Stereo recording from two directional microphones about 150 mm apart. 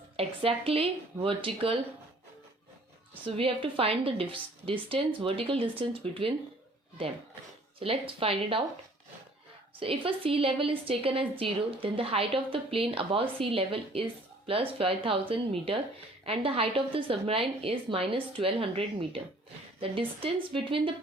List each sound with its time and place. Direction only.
0.2 s a woman's voice: 40° right (ahead or behind)
3.2 s a woman's voice: 40° right (ahead or behind)
7.8 s a woman's voice: 40° right (ahead or behind)
9.8 s a woman's voice: 35° right (ahead or behind)